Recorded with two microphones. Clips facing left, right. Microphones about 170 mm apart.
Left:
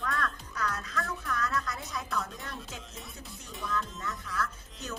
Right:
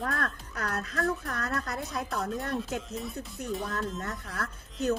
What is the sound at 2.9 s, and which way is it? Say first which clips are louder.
Speech: right 10 dB; centre (ahead or behind).